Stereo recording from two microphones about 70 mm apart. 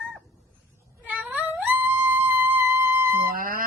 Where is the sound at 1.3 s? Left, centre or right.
Right.